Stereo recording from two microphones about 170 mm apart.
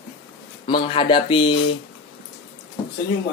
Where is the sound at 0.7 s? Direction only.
30° left (ahead or behind).